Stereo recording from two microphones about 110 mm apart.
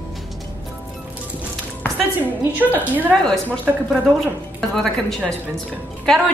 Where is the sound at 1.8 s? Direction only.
15° left (ahead or behind).